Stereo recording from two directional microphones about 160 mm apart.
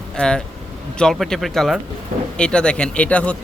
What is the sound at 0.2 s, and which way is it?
Speech, 5° left (ahead or behind).